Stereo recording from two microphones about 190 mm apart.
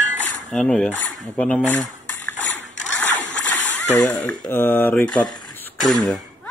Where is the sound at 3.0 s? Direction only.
10° left (ahead or behind).